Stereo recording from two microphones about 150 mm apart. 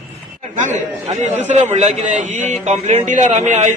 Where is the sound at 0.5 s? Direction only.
50° right (ahead or behind).